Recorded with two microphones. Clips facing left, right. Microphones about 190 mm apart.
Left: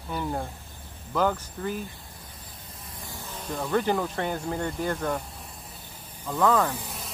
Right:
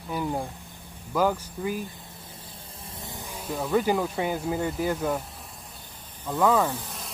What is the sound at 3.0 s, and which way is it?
Speech, 15° right (ahead or behind).